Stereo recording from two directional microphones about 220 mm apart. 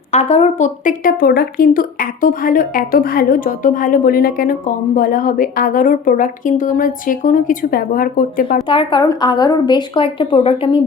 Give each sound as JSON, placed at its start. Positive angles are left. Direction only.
{"t": 0.1, "sound": "speech", "side_deg": 30}
{"t": 8.6, "sound": "a woman's voice", "side_deg": 20}